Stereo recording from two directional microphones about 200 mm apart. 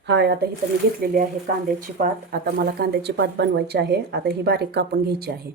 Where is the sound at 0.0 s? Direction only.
60° right (ahead or behind).